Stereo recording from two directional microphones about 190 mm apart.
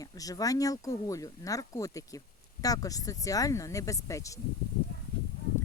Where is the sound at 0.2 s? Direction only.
20° left (ahead or behind).